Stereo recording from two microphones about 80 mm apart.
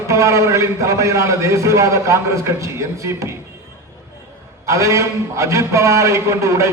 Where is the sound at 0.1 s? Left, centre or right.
Right.